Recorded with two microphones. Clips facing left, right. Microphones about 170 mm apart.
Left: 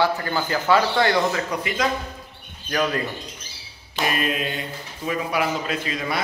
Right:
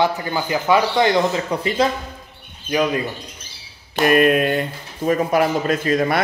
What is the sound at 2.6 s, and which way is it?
Speech, 15° right (ahead or behind).